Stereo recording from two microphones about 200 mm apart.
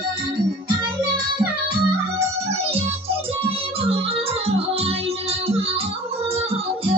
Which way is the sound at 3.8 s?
30° right (ahead or behind).